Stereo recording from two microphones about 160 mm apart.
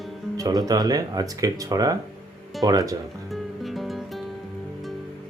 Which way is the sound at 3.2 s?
Centre (ahead or behind).